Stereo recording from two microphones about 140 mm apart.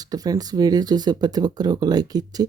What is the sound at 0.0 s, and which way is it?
Speech, 25° right (ahead or behind).